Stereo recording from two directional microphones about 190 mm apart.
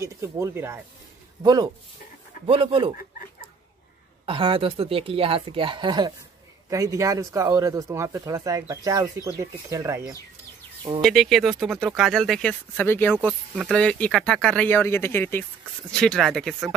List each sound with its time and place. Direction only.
0.0 s speech: 15° right (ahead or behind)
4.3 s speech: 30° right (ahead or behind)
11.0 s speech: centre (ahead or behind)
13.2 s speech: 5° right (ahead or behind)